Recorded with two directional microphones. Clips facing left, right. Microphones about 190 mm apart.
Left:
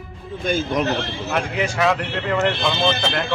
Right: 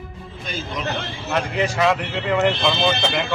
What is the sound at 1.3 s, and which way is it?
Speech, centre (ahead or behind).